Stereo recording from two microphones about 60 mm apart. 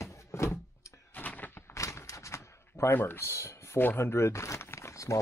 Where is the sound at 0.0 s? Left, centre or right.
Left.